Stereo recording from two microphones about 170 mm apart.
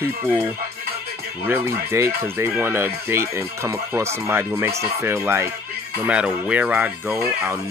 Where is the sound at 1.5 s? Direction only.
15° right (ahead or behind).